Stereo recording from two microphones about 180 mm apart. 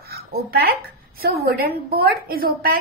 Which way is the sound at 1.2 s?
60° right (ahead or behind).